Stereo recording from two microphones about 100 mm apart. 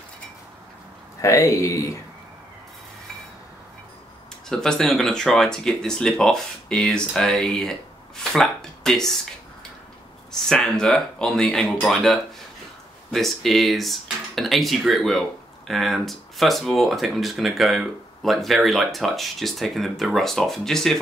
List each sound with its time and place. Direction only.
1.2 s speech: 30° left (ahead or behind)
4.5 s speech: 5° left (ahead or behind)
10.5 s speech: 5° left (ahead or behind)